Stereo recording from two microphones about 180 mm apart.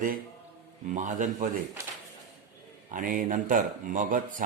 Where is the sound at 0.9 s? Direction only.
45° right (ahead or behind).